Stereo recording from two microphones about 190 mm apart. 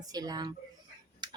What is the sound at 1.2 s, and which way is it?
Tick-tock, 20° right (ahead or behind).